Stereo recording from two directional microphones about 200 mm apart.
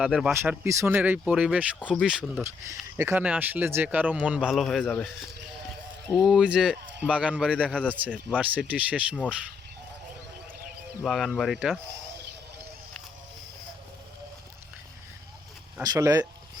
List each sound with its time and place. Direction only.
0.0 s speech: centre (ahead or behind)
0.6 s a man's voice: 15° right (ahead or behind); by 5.0 s 5° left (ahead or behind)
6.1 s a man's voice: centre (ahead or behind)
11.0 s speech: centre (ahead or behind)
15.8 s a man's voice: 15° right (ahead or behind)